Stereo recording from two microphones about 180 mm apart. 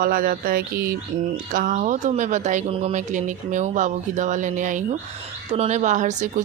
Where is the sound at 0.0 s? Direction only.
50° right (ahead or behind).